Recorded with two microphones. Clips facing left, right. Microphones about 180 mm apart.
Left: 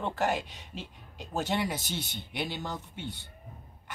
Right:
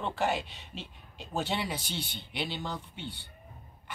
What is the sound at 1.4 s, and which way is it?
Speech, 45° left (ahead or behind).